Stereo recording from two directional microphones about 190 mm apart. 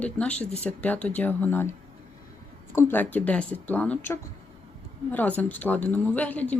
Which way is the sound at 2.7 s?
10° left (ahead or behind).